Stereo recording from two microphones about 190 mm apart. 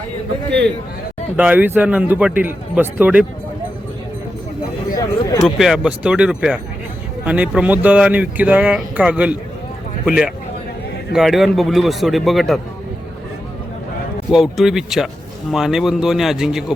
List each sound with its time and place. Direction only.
1.4 s speech: 10° right (ahead or behind)
4.9 s speech: 15° left (ahead or behind)
5.5 s speech: 5° right (ahead or behind)
14.3 s speech: centre (ahead or behind)